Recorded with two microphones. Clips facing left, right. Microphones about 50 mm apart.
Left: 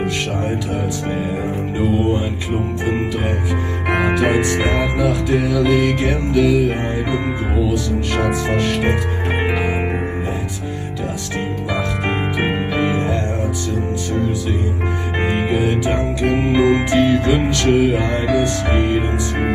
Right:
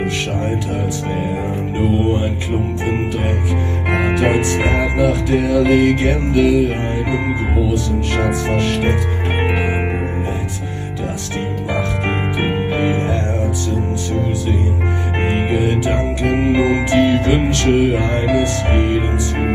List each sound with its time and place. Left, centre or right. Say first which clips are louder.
4.1 s speech: right 1 dB; right
4.6 s music: right 2 dB; right
12.4 s music: right 1 dB; left
16.0 s music: right 1 dB; right
16.5 s music: left 5 dB; left
16.9 s music: right 1 dB; right
18.7 s music: even; left